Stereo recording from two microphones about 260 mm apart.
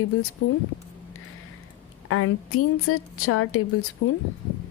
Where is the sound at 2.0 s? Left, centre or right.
Left.